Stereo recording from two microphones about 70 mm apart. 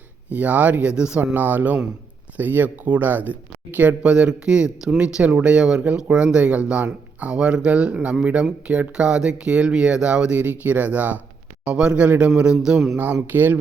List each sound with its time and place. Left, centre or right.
0.3 s speech: right
1.2 s speech: right; by 13.0 s centre
13.3 s speech: right